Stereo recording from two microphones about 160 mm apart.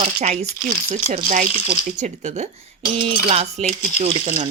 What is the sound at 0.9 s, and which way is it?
Speech, 55° right (ahead or behind).